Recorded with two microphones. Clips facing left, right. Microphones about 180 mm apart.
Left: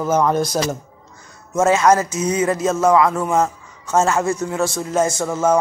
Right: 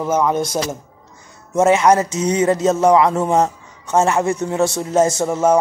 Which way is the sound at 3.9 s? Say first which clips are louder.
Right 1 dB; 15° right (ahead or behind).